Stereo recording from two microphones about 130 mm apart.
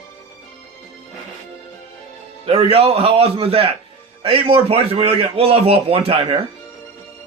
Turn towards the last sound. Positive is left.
turn(degrees=-45)  # may be behind; listen again after turning